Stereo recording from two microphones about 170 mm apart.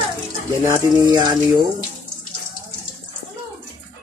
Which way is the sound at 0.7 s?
20° right (ahead or behind).